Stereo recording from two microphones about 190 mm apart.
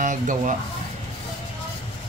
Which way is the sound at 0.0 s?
40° right (ahead or behind).